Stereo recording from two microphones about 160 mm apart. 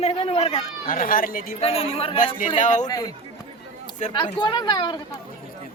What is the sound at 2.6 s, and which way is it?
Speech, 50° left (ahead or behind).